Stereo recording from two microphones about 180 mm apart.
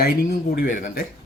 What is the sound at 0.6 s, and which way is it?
Speech, 45° left (ahead or behind).